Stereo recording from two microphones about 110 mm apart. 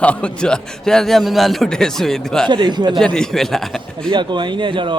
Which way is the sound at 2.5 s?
45° right (ahead or behind).